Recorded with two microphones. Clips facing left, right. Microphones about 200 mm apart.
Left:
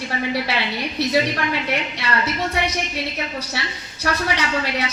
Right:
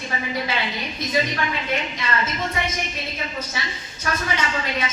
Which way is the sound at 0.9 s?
70° left (ahead or behind).